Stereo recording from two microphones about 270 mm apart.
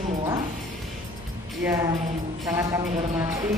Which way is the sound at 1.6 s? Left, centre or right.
Centre.